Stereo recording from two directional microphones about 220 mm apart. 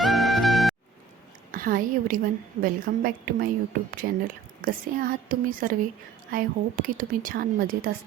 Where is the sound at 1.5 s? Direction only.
40° right (ahead or behind).